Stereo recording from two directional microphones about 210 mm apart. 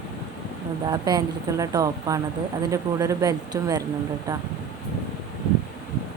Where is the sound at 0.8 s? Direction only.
20° right (ahead or behind).